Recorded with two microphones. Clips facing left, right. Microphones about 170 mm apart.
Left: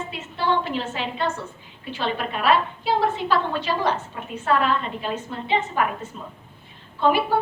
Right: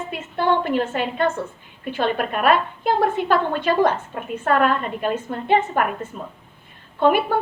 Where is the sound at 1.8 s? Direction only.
50° right (ahead or behind).